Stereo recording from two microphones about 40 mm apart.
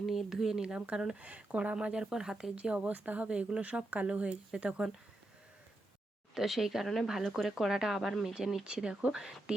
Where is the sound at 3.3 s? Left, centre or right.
Right.